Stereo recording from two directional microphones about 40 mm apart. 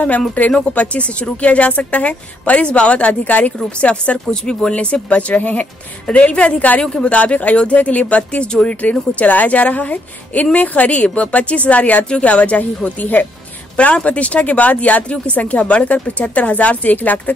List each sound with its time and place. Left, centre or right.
0.5 s speech: left
3.5 s speech: left
5.3 s speech: left
6.8 s speech: left
7.2 s speech: left
13.7 s speech: left